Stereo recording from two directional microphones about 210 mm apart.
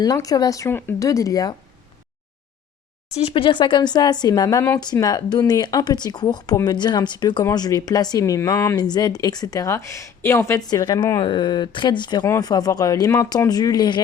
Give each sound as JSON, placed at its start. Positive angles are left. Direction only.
{"t": 0.0, "sound": "speech", "side_deg": 15}
{"t": 3.2, "sound": "speech", "side_deg": 25}